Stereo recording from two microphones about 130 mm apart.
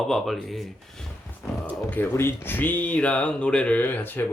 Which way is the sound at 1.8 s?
15° left (ahead or behind).